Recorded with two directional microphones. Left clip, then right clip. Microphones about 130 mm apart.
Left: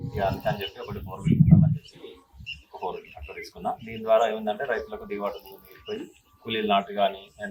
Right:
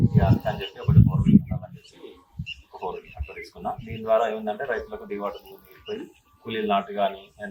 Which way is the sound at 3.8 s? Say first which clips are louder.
Even; 15° right (ahead or behind).